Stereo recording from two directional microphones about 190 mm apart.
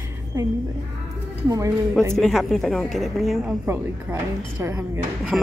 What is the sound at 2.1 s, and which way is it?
Speech, centre (ahead or behind).